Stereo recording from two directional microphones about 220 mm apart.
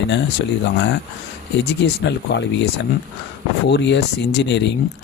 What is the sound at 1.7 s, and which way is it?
Speech, 50° left (ahead or behind).